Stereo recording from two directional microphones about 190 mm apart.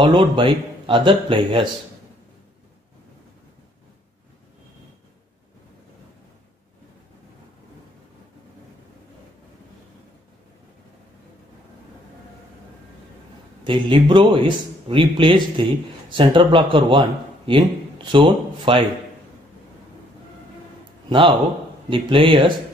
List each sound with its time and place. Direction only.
0.0 s speech: 25° right (ahead or behind)
13.7 s speech: 25° right (ahead or behind)
21.1 s speech: 25° right (ahead or behind)